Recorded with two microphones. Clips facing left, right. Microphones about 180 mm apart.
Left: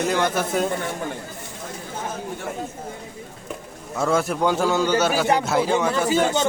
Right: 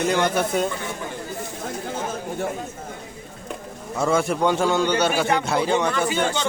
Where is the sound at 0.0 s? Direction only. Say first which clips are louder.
Right 1 dB; centre (ahead or behind).